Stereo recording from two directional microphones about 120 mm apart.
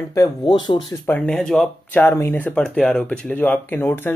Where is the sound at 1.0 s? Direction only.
10° left (ahead or behind).